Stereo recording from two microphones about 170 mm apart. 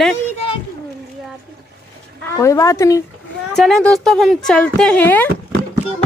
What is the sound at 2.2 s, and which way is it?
Speech, 15° left (ahead or behind).